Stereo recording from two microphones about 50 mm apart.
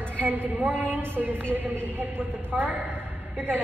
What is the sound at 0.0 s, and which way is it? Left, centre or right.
A woman's voice, right.